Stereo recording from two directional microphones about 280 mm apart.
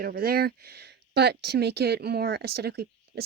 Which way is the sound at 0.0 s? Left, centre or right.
Right.